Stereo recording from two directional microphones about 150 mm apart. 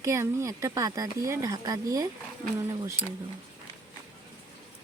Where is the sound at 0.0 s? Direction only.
20° right (ahead or behind).